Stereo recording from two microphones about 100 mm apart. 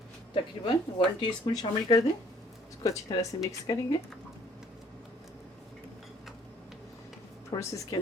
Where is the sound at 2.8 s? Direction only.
35° left (ahead or behind).